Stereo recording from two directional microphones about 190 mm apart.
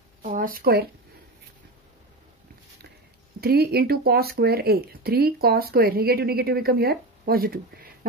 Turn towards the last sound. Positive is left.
turn(degrees=-50)  # may be behind; listen again after turning